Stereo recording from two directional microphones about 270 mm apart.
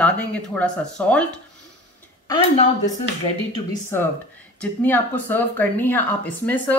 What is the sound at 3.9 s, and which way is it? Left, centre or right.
Speech, centre.